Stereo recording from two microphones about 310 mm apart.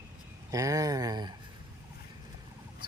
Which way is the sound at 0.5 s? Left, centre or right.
Centre.